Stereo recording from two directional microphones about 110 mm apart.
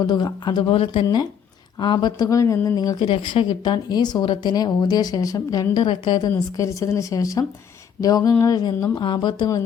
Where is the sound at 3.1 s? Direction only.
50° left (ahead or behind).